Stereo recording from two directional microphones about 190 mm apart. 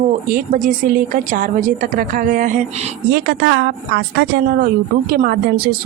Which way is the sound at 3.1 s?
60° right (ahead or behind).